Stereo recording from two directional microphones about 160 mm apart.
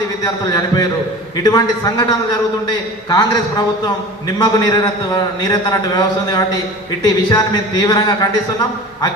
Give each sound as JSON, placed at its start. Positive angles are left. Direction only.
{"t": 0.2, "sound": "speech", "side_deg": 20}
{"t": 3.1, "sound": "speech", "side_deg": 25}
{"t": 4.4, "sound": "speech", "side_deg": 25}